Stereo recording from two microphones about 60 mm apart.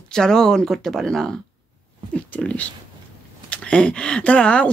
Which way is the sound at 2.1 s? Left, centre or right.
Centre.